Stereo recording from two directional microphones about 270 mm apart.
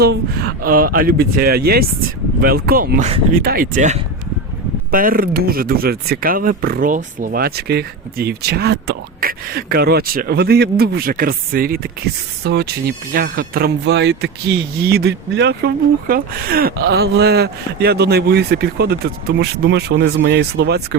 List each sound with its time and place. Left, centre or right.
0.0 s speech: right